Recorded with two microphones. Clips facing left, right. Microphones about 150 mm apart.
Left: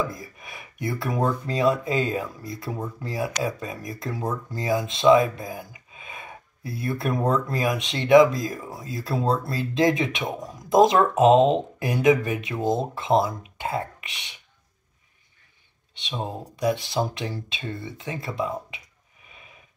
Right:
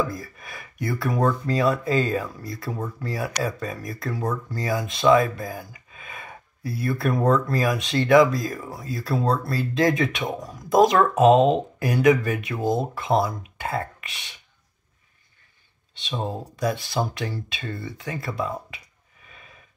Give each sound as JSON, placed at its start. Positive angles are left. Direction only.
{"t": 0.1, "sound": "speech", "side_deg": 15}
{"t": 16.0, "sound": "speech", "side_deg": 15}